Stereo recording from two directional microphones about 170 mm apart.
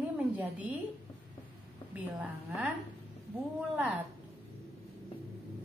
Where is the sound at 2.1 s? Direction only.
10° right (ahead or behind).